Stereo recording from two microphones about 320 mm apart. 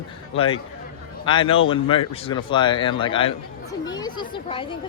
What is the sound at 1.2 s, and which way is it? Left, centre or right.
Speech, centre.